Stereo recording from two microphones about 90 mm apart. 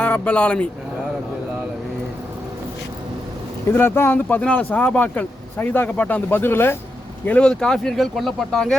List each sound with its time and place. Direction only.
0.0 s speech: 15° left (ahead or behind)
3.7 s speech: 25° left (ahead or behind)
7.3 s speech: 10° left (ahead or behind)